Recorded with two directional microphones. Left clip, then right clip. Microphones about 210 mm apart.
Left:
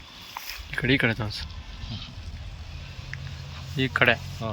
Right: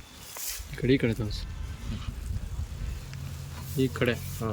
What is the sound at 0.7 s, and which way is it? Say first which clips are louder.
Speech: left 3 dB; 5° right (ahead or behind).